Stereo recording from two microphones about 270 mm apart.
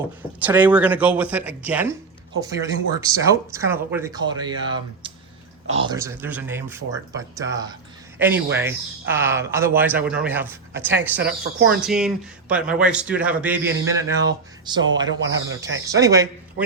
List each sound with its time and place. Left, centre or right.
0.2 s speech: centre
15.2 s speech: right
15.9 s speech: centre